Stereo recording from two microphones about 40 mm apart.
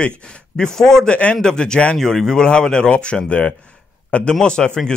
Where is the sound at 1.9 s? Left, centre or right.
Centre; by 4.3 s left.